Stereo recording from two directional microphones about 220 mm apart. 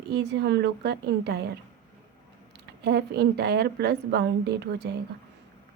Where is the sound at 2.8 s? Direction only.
50° right (ahead or behind).